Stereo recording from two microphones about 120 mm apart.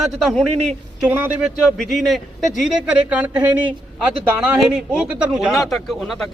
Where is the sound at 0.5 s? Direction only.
65° right (ahead or behind).